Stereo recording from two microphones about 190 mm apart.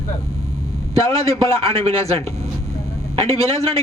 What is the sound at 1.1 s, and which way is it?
Speech, 20° left (ahead or behind).